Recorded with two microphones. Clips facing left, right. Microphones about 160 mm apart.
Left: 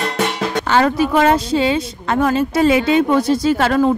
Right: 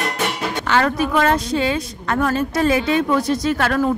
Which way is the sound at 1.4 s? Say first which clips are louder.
Left 4 dB; 30° left (ahead or behind).